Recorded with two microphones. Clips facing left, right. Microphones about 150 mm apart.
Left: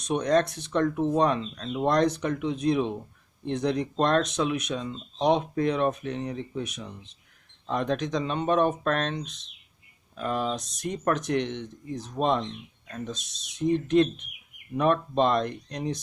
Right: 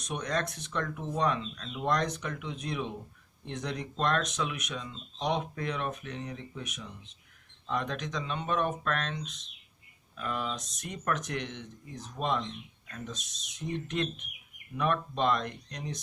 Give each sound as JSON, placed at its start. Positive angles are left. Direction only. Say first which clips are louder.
{"t": 0.0, "sound": "speech", "louder": "left 10 dB", "side_deg": 35}
{"t": 12.9, "sound": "speech", "louder": "left 6 dB", "side_deg": 35}